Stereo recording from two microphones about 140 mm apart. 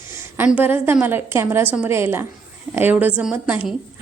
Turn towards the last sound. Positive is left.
turn(degrees=-10)  # may be behind; listen again after turning